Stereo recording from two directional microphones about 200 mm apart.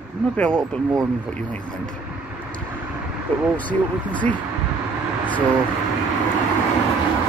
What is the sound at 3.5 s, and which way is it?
Speech, 5° left (ahead or behind).